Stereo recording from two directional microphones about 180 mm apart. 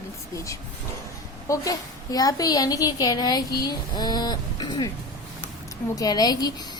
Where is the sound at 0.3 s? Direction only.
15° left (ahead or behind).